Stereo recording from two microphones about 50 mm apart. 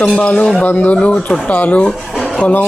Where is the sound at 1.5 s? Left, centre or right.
Left.